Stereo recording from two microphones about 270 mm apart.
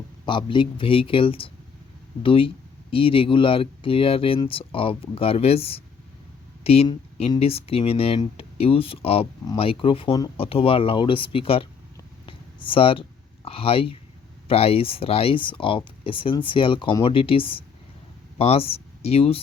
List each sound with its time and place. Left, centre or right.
0.3 s speech: centre
12.2 s a sound: centre
14.4 s speech: left